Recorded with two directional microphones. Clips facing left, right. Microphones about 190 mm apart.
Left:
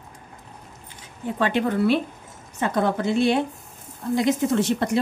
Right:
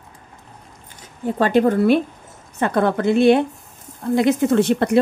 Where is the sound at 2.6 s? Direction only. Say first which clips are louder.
Right 4 dB; 60° right (ahead or behind).